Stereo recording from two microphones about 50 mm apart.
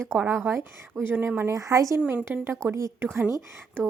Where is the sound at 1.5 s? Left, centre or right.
Right.